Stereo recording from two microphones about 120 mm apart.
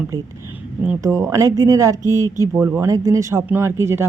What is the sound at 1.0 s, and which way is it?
Speech, 25° right (ahead or behind).